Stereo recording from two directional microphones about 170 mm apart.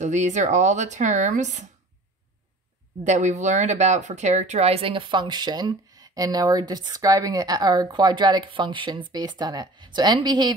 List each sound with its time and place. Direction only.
0.0 s speech: 45° right (ahead or behind)
3.0 s speech: 45° right (ahead or behind); by 10.5 s 25° right (ahead or behind)